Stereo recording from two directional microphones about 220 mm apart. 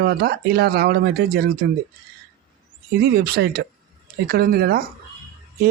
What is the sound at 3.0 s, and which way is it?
Speech, 45° right (ahead or behind).